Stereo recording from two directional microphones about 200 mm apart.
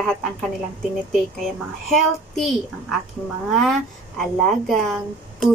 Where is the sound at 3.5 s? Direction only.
Centre (ahead or behind).